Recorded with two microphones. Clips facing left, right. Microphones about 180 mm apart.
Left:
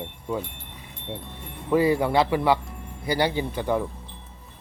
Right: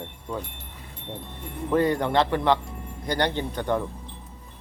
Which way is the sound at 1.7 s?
5° left (ahead or behind).